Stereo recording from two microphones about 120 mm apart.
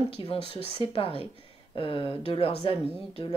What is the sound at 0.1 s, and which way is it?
Speech, 50° left (ahead or behind).